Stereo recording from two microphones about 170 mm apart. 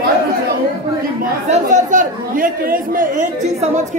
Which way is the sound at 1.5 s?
50° right (ahead or behind).